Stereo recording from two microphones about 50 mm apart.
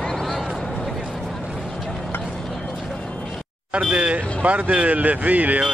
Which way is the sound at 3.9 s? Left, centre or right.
Right.